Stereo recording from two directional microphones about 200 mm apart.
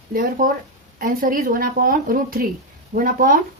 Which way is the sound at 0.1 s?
45° right (ahead or behind).